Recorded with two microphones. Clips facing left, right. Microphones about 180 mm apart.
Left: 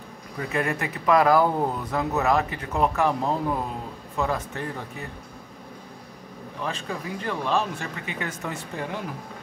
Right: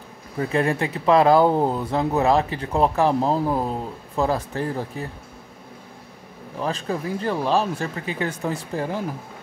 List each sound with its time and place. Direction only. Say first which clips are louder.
0.4 s speech: right 5 dB; 30° right (ahead or behind)
6.6 s speech: right 6 dB; 35° right (ahead or behind)